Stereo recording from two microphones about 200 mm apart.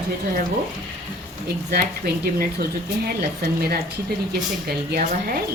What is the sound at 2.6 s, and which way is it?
A woman's voice, 50° right (ahead or behind).